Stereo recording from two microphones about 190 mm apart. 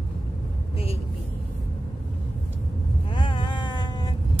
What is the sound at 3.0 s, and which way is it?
Wail, 25° left (ahead or behind).